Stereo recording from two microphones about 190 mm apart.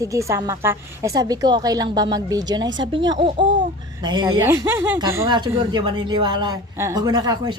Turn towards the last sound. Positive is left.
turn(degrees=-20)  # may be behind; listen again after turning